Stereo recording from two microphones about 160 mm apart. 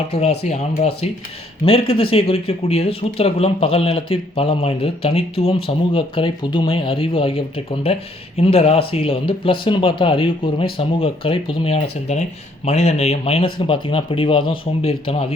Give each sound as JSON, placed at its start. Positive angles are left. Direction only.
{"t": 0.1, "sound": "speech", "side_deg": 40}